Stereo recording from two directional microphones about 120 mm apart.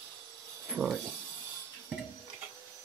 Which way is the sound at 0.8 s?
5° right (ahead or behind).